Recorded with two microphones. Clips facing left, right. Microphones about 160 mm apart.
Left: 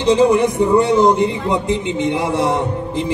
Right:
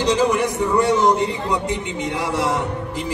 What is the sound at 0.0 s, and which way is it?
Speech, 25° left (ahead or behind).